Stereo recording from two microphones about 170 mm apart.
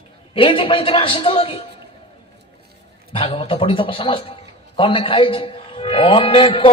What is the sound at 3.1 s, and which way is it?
A man's voice, 35° left (ahead or behind).